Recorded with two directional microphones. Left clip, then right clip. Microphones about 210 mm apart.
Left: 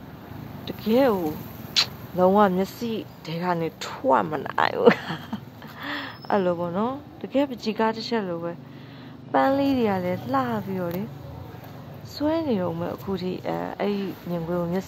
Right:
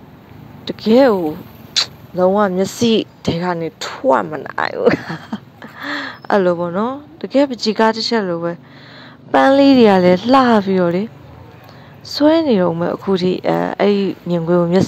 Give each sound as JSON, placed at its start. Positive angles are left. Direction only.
{"t": 0.7, "sound": "speech", "side_deg": -30}
{"t": 1.2, "sound": "speech", "side_deg": -20}
{"t": 2.6, "sound": "a woman's voice", "side_deg": -40}
{"t": 3.3, "sound": "a woman's voice", "side_deg": -25}
{"t": 12.2, "sound": "a woman's voice", "side_deg": -35}